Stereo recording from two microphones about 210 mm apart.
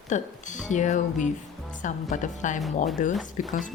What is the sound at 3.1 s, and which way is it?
Speech, centre (ahead or behind).